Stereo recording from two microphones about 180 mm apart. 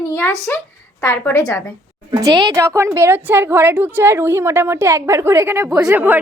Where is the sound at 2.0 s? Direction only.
25° right (ahead or behind).